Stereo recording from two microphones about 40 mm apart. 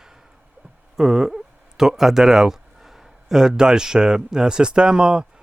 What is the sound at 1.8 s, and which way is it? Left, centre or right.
Speech, centre.